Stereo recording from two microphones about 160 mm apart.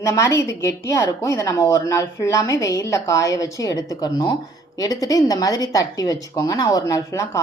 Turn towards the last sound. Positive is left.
turn(degrees=20)  # may be behind; listen again after turning